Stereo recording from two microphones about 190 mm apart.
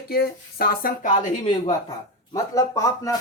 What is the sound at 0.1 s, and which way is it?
Speech, 55° left (ahead or behind).